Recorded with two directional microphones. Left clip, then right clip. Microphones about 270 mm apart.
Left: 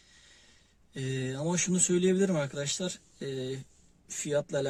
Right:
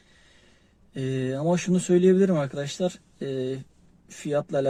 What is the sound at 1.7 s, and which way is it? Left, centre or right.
Speech, left.